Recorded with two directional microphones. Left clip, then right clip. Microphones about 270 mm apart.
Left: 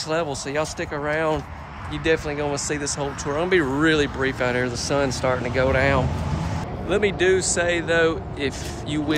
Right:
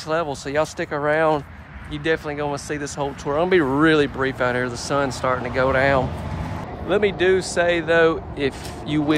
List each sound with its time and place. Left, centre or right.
0.1 s speech: centre